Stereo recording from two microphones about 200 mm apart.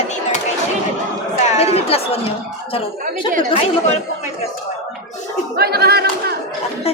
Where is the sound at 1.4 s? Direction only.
30° left (ahead or behind).